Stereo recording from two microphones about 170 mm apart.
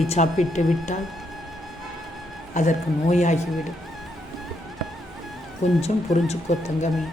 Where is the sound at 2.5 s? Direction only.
45° left (ahead or behind).